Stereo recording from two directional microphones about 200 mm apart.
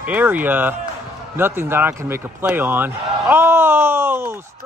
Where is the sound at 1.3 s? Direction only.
10° right (ahead or behind).